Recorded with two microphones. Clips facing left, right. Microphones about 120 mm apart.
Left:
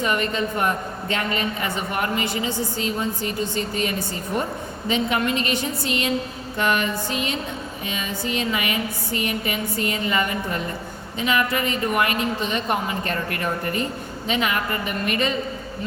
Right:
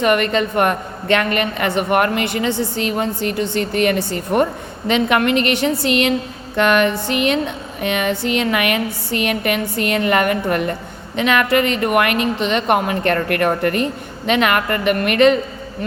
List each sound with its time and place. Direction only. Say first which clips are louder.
0.0 s a woman's voice: right 7 dB; 70° right (ahead or behind)